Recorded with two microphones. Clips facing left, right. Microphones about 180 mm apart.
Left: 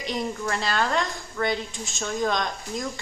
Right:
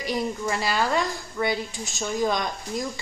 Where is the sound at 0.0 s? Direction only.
5° right (ahead or behind).